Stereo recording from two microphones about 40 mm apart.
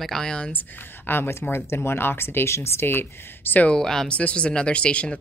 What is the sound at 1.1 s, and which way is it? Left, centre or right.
Speech, left.